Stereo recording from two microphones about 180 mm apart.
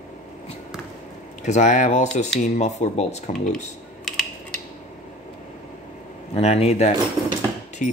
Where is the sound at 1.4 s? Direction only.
40° left (ahead or behind).